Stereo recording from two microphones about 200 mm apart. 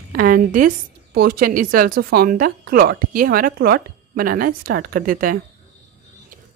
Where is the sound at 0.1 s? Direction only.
45° right (ahead or behind).